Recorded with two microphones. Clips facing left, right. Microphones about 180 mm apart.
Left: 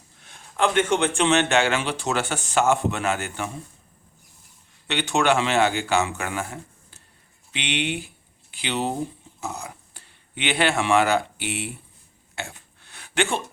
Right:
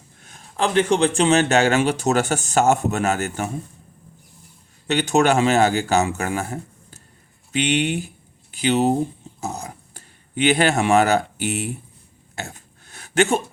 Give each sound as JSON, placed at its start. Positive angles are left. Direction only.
{"t": 0.2, "sound": "speech", "side_deg": -40}
{"t": 4.9, "sound": "speech", "side_deg": -40}
{"t": 12.4, "sound": "a sound", "side_deg": -40}